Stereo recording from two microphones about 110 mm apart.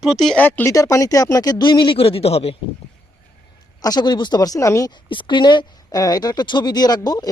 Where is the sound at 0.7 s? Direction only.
30° left (ahead or behind); by 2.6 s 65° left (ahead or behind).